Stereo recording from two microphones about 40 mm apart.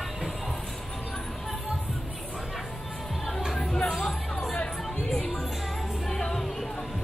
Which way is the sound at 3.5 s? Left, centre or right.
Left.